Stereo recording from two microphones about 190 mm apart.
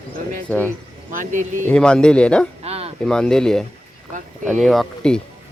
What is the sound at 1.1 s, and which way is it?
Speech, 40° right (ahead or behind).